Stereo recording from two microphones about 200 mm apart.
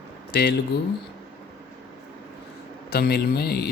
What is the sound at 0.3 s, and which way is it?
Speech, 55° left (ahead or behind).